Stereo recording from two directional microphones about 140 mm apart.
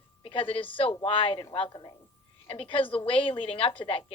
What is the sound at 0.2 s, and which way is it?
A woman's voice, 40° left (ahead or behind).